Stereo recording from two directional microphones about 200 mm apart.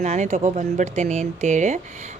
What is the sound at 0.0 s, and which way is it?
A woman's voice, 35° right (ahead or behind).